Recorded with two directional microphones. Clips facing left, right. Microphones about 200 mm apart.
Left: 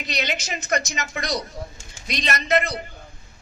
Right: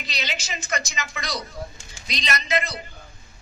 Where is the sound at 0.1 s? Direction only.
55° left (ahead or behind).